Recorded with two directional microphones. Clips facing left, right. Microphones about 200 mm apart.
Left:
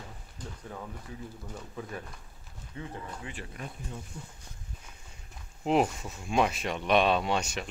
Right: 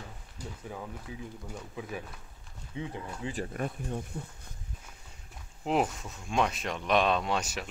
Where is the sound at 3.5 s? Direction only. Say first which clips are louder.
Right 7 dB; 55° right (ahead or behind).